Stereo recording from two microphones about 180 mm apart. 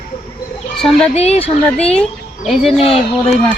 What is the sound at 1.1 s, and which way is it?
Speech, 35° left (ahead or behind).